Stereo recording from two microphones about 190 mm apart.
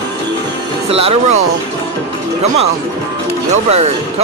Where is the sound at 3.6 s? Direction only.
35° right (ahead or behind).